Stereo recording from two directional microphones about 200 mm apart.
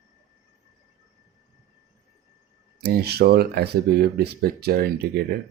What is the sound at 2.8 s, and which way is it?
Speech, 50° right (ahead or behind).